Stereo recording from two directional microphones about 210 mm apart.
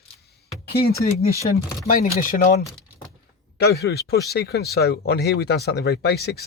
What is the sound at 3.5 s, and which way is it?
Speech, 50° left (ahead or behind).